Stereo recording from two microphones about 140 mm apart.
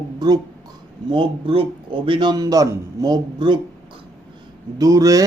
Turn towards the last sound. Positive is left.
turn(degrees=-25)  # may be behind; listen again after turning